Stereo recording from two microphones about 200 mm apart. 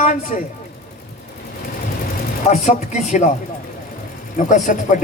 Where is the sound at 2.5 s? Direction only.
35° left (ahead or behind).